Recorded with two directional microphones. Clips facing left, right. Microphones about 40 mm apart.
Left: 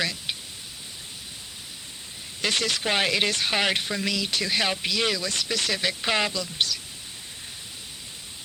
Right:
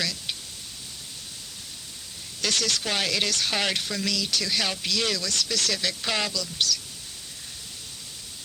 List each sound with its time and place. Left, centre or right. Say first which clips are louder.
0.0 s pink noise: left 2 dB; left
2.4 s speech: left 1 dB; left